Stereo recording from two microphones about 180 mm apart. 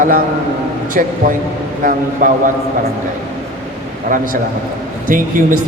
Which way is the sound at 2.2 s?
50° right (ahead or behind).